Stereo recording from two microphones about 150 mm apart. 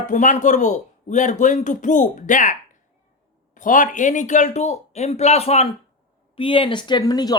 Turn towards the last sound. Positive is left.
turn(degrees=25)  # may be behind; listen again after turning